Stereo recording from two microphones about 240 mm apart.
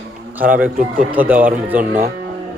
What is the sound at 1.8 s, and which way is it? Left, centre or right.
Speech, right.